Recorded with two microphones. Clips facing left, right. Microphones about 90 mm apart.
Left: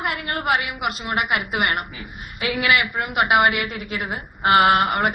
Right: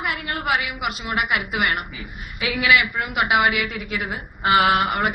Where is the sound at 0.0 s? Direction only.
45° left (ahead or behind).